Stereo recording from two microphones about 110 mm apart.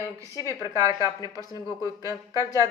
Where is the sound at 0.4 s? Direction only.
30° right (ahead or behind).